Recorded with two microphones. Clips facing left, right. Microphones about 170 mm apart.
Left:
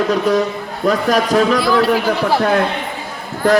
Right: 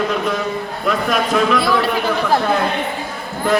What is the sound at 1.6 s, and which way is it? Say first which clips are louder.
Speech: left 3 dB; centre (ahead or behind).